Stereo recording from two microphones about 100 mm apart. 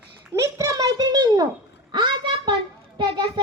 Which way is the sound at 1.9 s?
50° right (ahead or behind).